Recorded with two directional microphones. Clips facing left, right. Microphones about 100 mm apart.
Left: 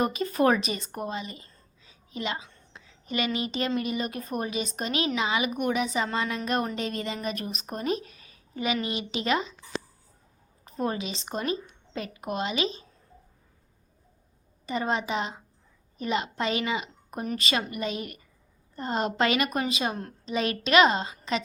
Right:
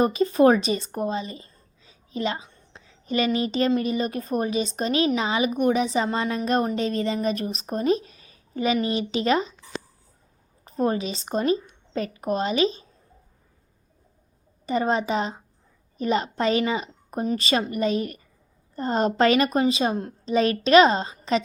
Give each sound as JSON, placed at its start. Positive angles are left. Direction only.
{"t": 0.0, "sound": "a woman's voice", "side_deg": -30}
{"t": 10.7, "sound": "speech", "side_deg": -35}
{"t": 14.7, "sound": "speech", "side_deg": -35}